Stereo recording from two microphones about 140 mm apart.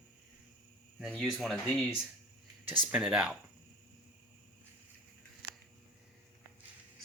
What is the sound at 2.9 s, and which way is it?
Speech, 10° right (ahead or behind).